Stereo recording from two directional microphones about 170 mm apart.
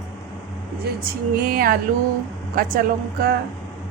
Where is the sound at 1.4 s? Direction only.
60° right (ahead or behind).